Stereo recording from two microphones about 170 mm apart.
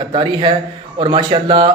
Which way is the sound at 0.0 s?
30° right (ahead or behind).